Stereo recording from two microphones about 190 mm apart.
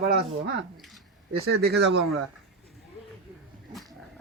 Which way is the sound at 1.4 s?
55° right (ahead or behind).